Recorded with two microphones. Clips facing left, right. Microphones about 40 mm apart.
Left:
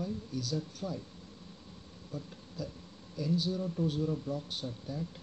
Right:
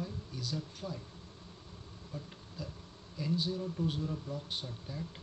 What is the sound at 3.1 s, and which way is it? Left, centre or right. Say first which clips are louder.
Speech: left 2 dB; right.